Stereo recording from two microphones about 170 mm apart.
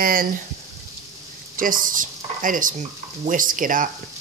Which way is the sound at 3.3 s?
50° right (ahead or behind).